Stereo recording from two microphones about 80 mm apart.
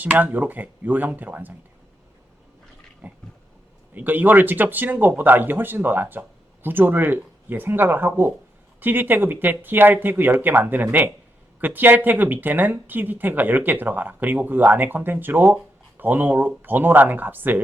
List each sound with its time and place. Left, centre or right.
0.0 s speech: centre
3.0 s a sound: right
3.9 s speech: right